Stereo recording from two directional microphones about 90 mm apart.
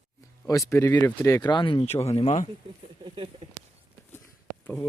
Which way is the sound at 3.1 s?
75° right (ahead or behind).